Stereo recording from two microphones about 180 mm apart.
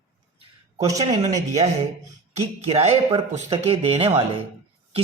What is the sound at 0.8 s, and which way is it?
Speech, 20° right (ahead or behind).